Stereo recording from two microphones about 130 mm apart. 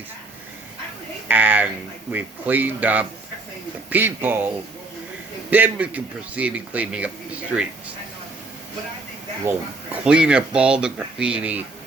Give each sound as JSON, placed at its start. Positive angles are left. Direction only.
{"t": 1.3, "sound": "a man's voice", "side_deg": -15}
{"t": 9.4, "sound": "a man's voice", "side_deg": -15}